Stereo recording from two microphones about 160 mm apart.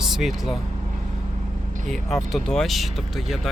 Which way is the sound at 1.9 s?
Centre (ahead or behind).